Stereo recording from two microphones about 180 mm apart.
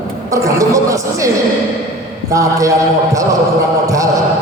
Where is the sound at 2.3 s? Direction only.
15° right (ahead or behind).